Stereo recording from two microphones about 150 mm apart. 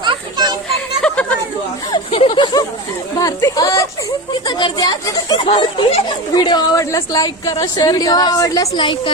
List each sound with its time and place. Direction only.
0.0 s children playing: 30° right (ahead or behind)
1.0 s chatter: 10° left (ahead or behind)
1.9 s a sound: 35° left (ahead or behind)
3.2 s speech: 25° left (ahead or behind)